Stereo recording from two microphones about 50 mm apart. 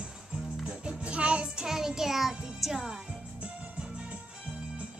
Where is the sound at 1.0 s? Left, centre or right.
Right.